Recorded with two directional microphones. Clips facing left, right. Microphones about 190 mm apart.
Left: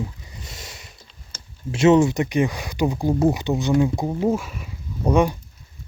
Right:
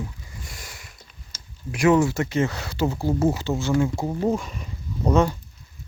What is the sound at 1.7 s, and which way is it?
Speech, 25° left (ahead or behind).